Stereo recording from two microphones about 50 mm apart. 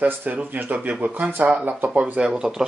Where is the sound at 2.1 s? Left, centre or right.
Centre.